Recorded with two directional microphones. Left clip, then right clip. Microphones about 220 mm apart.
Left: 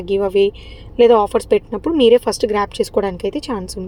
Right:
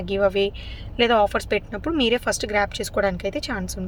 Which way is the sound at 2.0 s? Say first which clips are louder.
Left 10 dB; 10° left (ahead or behind).